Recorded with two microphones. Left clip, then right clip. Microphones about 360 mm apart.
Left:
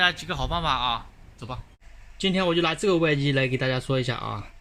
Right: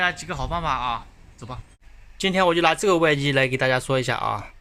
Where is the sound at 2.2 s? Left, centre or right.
Centre.